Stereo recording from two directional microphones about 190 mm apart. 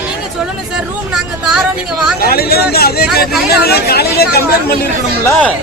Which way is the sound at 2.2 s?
55° left (ahead or behind).